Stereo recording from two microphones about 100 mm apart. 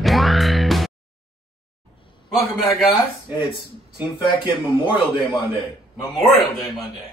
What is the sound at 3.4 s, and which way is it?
A man's voice, 55° left (ahead or behind).